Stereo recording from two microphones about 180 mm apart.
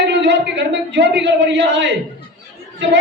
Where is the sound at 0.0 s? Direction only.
80° right.